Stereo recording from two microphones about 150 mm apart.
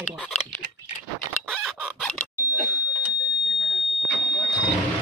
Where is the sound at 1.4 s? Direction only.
5° left (ahead or behind).